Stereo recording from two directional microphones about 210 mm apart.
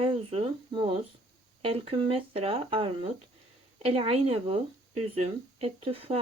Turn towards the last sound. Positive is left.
turn(degrees=-25)  # may be behind; listen again after turning